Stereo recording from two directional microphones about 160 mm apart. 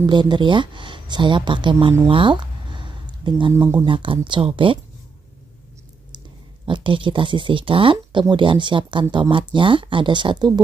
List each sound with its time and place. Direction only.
0.0 s speech: 30° right (ahead or behind)
2.0 s a sound: 30° right (ahead or behind)
3.5 s speech: 15° right (ahead or behind)
3.8 s speech: 30° right (ahead or behind)
6.1 s speech: 30° right (ahead or behind)